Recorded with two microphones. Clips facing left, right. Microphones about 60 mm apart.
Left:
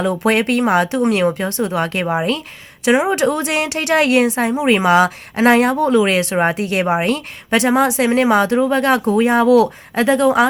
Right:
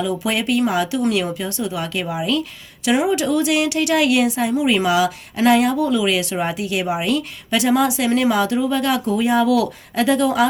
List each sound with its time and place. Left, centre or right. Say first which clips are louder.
0.0 s a woman's voice: left 5 dB; left